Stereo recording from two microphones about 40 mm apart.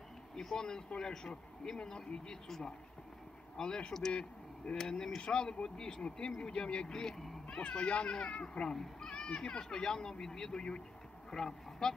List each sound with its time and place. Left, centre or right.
0.4 s speech: centre
3.5 s speech: centre
6.9 s speech: centre
7.4 s speech: left